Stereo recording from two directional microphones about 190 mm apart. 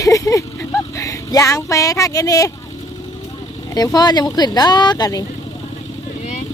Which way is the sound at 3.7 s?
20° left (ahead or behind).